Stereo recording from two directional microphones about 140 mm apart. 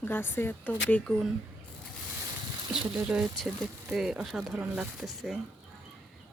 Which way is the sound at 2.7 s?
5° right (ahead or behind).